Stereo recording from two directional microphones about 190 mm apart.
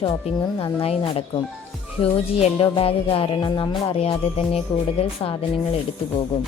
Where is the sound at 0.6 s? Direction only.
30° left (ahead or behind).